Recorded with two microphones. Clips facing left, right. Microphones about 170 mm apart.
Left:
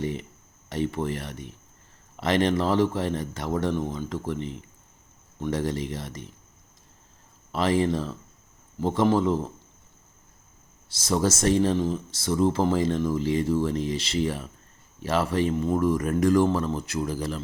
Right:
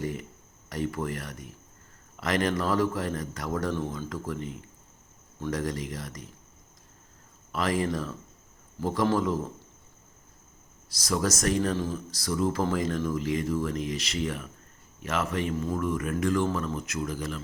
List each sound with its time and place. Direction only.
0.0 s a sound: 25° left (ahead or behind)
0.7 s speech: 25° left (ahead or behind)
7.5 s speech: 30° left (ahead or behind)
10.8 s speech: 25° left (ahead or behind)